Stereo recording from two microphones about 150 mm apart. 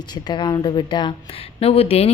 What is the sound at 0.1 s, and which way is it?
A woman's voice, 30° left (ahead or behind).